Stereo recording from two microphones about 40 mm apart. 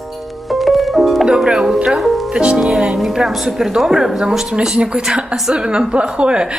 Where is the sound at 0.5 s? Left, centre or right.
Centre.